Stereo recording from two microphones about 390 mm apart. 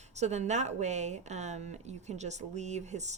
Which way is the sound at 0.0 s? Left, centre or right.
Centre.